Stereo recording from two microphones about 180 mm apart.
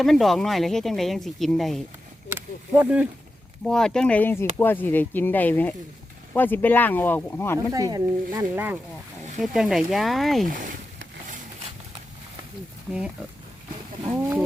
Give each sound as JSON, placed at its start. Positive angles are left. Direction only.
{"t": 0.0, "sound": "speech", "side_deg": 0}
{"t": 3.6, "sound": "speech", "side_deg": 5}
{"t": 7.7, "sound": "speech", "side_deg": -20}
{"t": 12.9, "sound": "speech", "side_deg": -5}
{"t": 14.2, "sound": "speech", "side_deg": -10}